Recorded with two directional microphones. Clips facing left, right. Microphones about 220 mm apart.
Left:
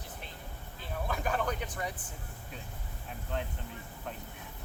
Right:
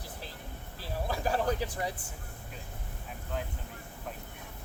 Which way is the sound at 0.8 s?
35° right (ahead or behind).